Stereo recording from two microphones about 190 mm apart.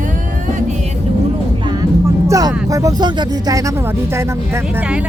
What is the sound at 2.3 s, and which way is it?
Speech, 20° right (ahead or behind).